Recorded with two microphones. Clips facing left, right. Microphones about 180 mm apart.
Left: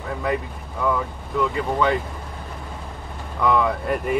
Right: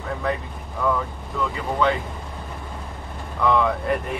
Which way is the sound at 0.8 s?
Centre (ahead or behind).